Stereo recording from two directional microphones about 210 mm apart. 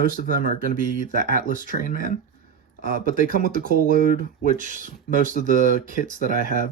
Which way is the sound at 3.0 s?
40° right (ahead or behind).